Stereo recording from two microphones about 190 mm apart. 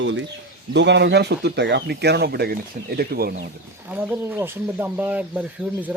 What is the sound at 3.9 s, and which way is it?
Speech, 10° right (ahead or behind).